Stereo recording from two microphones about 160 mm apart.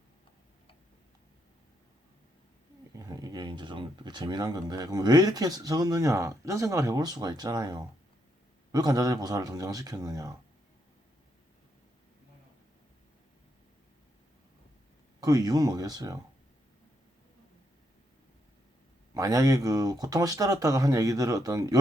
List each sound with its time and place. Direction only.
3.0 s speech: 25° right (ahead or behind)
15.2 s speech: 25° right (ahead or behind)
19.1 s speech: 20° right (ahead or behind)